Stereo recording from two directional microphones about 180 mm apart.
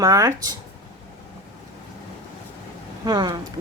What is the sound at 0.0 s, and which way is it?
Speech, 20° right (ahead or behind).